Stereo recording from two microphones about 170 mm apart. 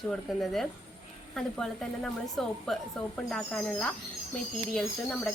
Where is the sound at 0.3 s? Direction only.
Centre (ahead or behind).